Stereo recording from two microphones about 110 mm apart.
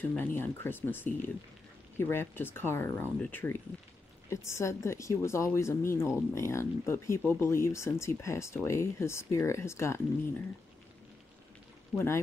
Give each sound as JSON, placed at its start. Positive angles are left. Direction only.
{"t": 0.2, "sound": "speech", "side_deg": 20}
{"t": 11.9, "sound": "speech", "side_deg": 5}